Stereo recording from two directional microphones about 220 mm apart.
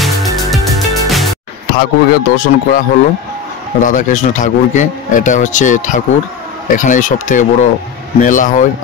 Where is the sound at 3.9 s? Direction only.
35° left (ahead or behind).